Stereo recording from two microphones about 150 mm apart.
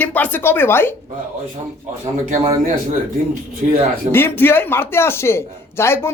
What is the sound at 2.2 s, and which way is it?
Speech, 55° right (ahead or behind).